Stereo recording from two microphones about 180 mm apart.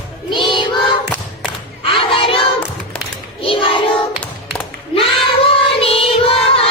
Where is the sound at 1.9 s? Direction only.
30° left (ahead or behind).